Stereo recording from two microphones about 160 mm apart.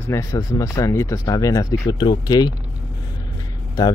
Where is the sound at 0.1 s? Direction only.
20° left (ahead or behind).